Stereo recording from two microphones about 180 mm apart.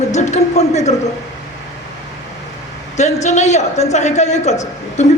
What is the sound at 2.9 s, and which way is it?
A man's voice, 40° left (ahead or behind).